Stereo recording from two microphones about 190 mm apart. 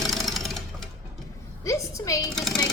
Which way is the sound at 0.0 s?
Centre (ahead or behind).